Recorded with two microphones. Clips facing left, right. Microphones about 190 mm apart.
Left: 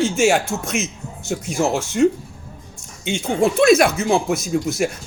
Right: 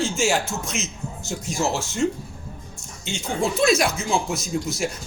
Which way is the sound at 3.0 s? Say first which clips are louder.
Left 6 dB; 60° left (ahead or behind).